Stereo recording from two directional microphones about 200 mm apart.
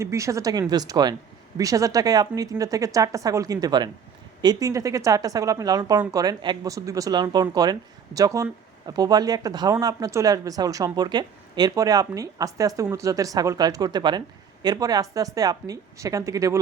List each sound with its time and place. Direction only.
0.0 s speech: 15° right (ahead or behind)